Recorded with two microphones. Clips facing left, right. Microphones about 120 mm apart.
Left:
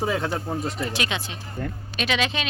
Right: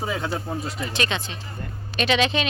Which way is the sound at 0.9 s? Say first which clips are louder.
Right 2 dB; 10° left (ahead or behind).